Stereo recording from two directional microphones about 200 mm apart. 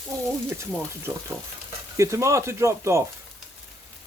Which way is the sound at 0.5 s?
15° right (ahead or behind).